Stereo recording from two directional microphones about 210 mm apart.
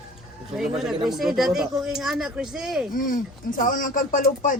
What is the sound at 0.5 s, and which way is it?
Speech, centre (ahead or behind).